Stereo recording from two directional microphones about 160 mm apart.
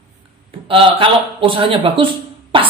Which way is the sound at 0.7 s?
35° right (ahead or behind).